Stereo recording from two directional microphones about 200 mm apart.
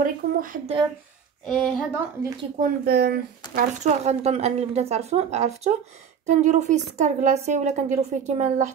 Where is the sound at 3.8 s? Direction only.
35° right (ahead or behind).